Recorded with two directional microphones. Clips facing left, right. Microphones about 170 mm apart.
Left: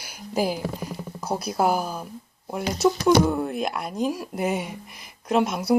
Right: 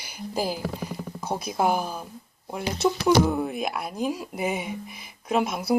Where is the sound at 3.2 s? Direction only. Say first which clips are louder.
Left 1 dB; centre (ahead or behind).